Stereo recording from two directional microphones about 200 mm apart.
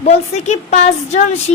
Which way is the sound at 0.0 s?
35° left (ahead or behind).